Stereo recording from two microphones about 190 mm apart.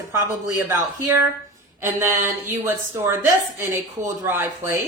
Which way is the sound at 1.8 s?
10° right (ahead or behind).